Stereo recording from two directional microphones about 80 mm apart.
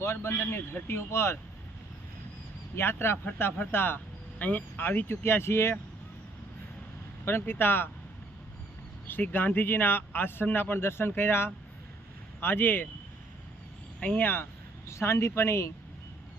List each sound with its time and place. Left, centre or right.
0.0 s speech: left
2.7 s speech: left
7.3 s speech: left
9.0 s speech: left
14.0 s speech: centre
14.8 s speech: left